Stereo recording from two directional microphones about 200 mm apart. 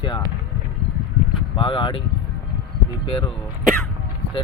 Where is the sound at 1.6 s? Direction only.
25° left (ahead or behind).